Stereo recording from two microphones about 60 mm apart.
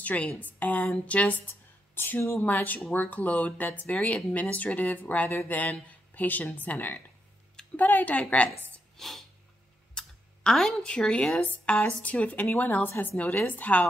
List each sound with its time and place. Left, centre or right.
0.0 s a woman's voice: left
2.0 s speech: left
2.3 s speech: left
8.9 s a sound: centre
9.9 s speech: centre; by 13.8 s left